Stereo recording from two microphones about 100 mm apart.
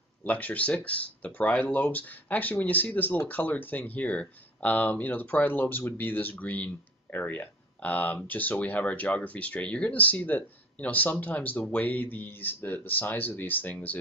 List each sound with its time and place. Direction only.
0.2 s speech: 15° left (ahead or behind)